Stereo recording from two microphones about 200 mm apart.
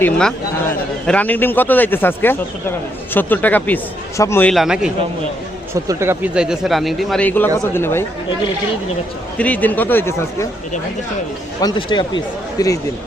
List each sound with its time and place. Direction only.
0.0 s speech: 5° left (ahead or behind)
4.5 s speech: centre (ahead or behind)
5.7 s speech: 15° right (ahead or behind); by 8.0 s 10° left (ahead or behind)
9.4 s speech: 10° left (ahead or behind)
11.6 s speech: 25° left (ahead or behind)